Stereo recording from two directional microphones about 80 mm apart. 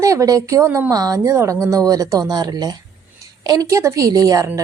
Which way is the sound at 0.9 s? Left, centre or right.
Right.